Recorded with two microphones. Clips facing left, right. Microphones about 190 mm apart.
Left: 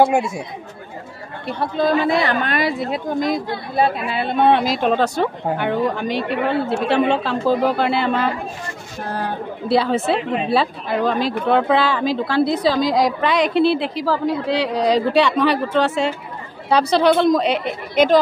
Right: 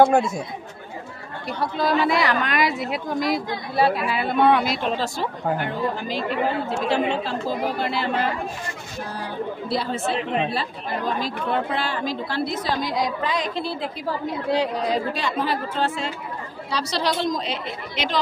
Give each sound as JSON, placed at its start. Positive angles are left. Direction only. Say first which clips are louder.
{"t": 0.0, "sound": "speech", "louder": "even", "side_deg": 10}
{"t": 1.6, "sound": "speech", "louder": "left 4 dB", "side_deg": 55}
{"t": 2.0, "sound": "a woman's voice", "louder": "left 3 dB", "side_deg": 25}
{"t": 4.6, "sound": "speech", "louder": "left 6 dB", "side_deg": 50}
{"t": 9.1, "sound": "speech", "louder": "left 4 dB", "side_deg": 65}
{"t": 16.6, "sound": "speech", "louder": "left 10 dB", "side_deg": 55}